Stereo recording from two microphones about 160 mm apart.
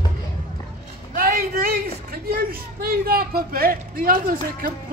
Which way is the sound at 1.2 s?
60° right (ahead or behind).